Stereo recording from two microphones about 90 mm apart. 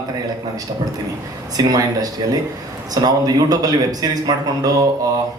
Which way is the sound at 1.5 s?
45° right (ahead or behind).